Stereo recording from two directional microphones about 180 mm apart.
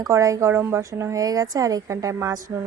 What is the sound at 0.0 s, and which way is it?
Speech, 15° right (ahead or behind).